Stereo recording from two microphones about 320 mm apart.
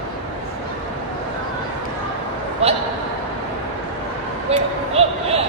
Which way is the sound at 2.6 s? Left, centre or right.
Centre.